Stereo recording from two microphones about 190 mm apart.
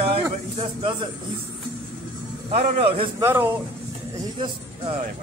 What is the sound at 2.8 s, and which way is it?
Speech, 30° right (ahead or behind).